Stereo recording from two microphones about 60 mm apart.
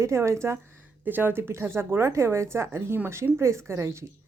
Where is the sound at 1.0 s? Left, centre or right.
Right.